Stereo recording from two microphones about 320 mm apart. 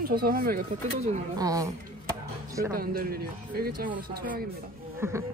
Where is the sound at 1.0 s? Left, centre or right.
Centre.